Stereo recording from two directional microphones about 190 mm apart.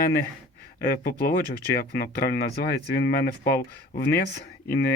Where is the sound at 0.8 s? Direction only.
55° left (ahead or behind).